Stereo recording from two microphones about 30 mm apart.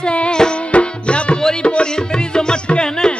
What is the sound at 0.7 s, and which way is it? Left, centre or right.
Tabla, left.